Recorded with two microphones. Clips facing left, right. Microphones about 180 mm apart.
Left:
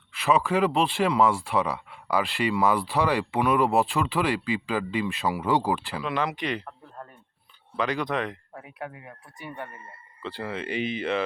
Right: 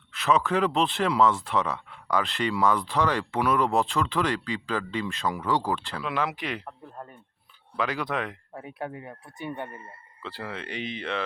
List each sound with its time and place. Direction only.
0.1 s speech: centre (ahead or behind)
6.0 s speech: 5° right (ahead or behind)
7.7 s speech: 5° right (ahead or behind)
8.5 s speech: 30° right (ahead or behind)
10.2 s speech: centre (ahead or behind)